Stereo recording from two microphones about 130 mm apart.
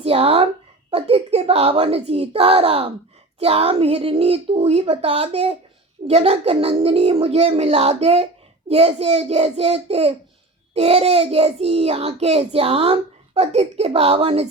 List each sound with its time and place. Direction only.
0.0 s a child's voice: 50° right (ahead or behind)